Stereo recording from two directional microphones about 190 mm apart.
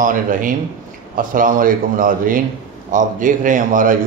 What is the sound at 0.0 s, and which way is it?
Speech, 45° right (ahead or behind).